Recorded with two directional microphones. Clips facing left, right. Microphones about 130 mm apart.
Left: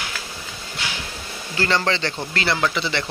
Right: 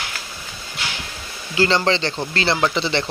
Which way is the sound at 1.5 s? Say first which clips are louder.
Right 4 dB; 25° right (ahead or behind).